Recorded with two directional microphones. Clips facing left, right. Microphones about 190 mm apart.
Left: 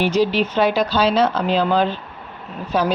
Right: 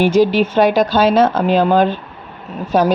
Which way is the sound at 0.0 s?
50° right (ahead or behind).